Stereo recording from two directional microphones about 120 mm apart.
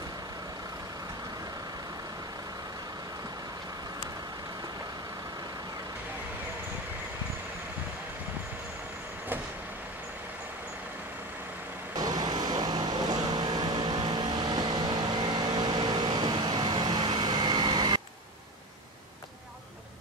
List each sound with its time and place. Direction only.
12.0 s vehicle: 35° right (ahead or behind)